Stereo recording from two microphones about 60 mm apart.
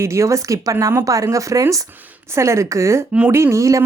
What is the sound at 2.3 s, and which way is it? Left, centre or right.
Speech, right.